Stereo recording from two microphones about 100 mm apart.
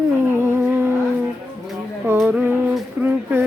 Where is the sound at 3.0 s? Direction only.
20° right (ahead or behind).